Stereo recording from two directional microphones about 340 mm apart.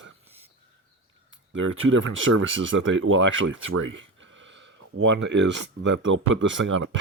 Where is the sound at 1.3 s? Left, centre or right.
Right.